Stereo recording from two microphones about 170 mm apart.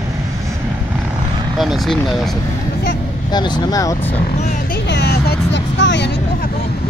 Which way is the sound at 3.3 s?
25° left (ahead or behind).